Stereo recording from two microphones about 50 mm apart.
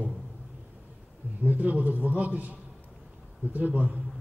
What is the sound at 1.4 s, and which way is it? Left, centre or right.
A man's voice, right.